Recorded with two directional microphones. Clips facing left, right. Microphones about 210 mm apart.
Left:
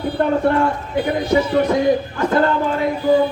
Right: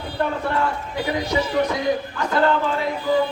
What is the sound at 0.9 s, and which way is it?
Speech, 55° left (ahead or behind).